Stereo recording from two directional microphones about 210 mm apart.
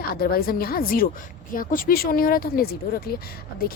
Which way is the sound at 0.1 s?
45° left (ahead or behind).